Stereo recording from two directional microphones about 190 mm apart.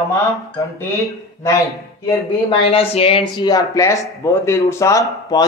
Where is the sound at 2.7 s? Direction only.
30° left (ahead or behind).